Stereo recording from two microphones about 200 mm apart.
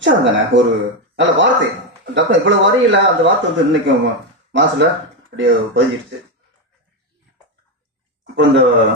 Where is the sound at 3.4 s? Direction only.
65° right (ahead or behind).